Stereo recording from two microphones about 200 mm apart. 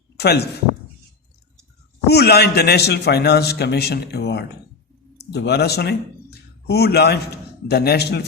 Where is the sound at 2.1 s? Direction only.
55° left (ahead or behind).